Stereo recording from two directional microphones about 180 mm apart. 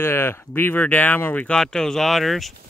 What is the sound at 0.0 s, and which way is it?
Speech, 15° left (ahead or behind).